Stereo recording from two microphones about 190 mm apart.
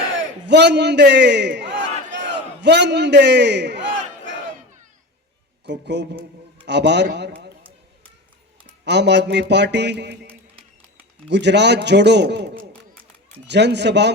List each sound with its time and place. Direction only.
0.4 s a man's voice: 65° right (ahead or behind)
5.6 s speech: 65° right (ahead or behind)
8.8 s speech: 65° right (ahead or behind)
11.3 s speech: 65° right (ahead or behind)
12.7 s run: 5° left (ahead or behind)
13.5 s speech: 65° right (ahead or behind)